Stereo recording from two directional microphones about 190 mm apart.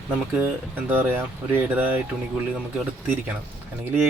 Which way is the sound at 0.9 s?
10° right (ahead or behind).